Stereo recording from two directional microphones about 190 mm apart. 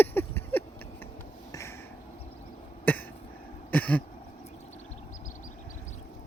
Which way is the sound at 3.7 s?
10° left (ahead or behind).